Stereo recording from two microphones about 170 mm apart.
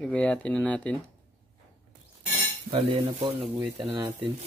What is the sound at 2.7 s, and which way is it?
Stir, 30° right (ahead or behind).